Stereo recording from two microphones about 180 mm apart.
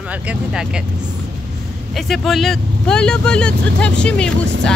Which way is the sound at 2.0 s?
Centre (ahead or behind).